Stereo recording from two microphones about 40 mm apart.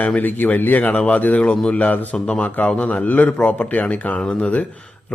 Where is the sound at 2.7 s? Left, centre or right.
Left.